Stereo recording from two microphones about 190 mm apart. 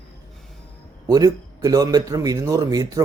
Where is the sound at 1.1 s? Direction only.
20° right (ahead or behind).